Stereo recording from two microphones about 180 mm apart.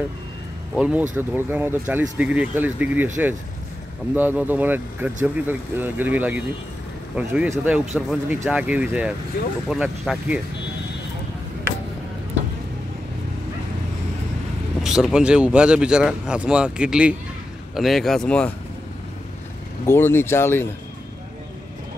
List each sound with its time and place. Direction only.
0.7 s a man's voice: 5° right (ahead or behind)
4.1 s speech: 10° right (ahead or behind)
9.3 s speech: 55° left (ahead or behind)
9.7 s a man's voice: 5° right (ahead or behind)
14.8 s a man's voice: 5° right (ahead or behind)
19.9 s speech: 10° left (ahead or behind)